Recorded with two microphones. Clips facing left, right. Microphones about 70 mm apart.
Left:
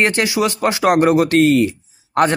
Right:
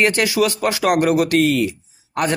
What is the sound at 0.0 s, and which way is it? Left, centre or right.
Speech, left.